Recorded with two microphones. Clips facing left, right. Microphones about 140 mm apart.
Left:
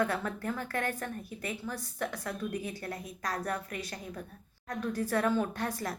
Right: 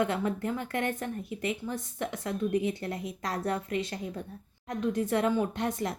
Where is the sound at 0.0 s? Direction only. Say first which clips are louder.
Right 3 dB; 20° right (ahead or behind).